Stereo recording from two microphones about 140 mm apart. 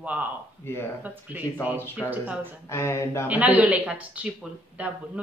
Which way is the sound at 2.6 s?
20° left (ahead or behind).